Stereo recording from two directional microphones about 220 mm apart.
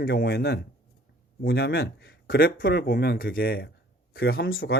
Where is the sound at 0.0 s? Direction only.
45° left (ahead or behind).